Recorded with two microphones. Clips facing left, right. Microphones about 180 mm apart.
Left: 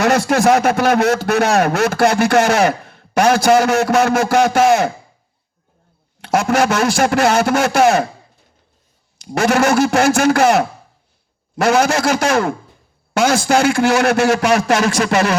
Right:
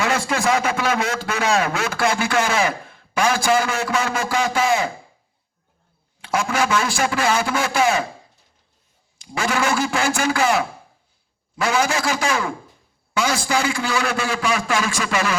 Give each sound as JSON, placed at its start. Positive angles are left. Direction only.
{"t": 0.0, "sound": "speech", "side_deg": 70}
{"t": 6.1, "sound": "speech", "side_deg": 70}
{"t": 9.2, "sound": "speech", "side_deg": 70}